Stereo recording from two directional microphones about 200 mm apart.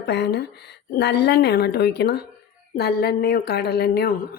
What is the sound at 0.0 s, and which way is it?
A woman's voice, 55° left (ahead or behind).